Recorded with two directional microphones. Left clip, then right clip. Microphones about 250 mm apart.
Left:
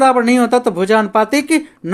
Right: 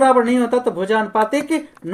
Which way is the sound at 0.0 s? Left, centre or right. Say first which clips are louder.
Left 2 dB; left.